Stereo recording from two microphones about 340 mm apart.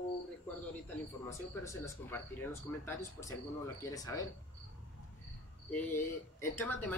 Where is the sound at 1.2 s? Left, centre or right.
Centre.